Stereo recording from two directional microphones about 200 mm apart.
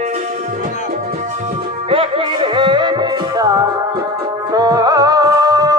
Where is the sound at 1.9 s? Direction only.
25° right (ahead or behind).